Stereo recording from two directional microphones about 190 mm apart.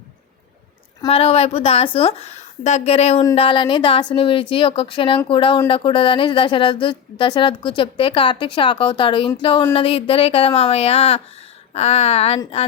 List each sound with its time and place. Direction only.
1.0 s a woman's voice: 30° left (ahead or behind)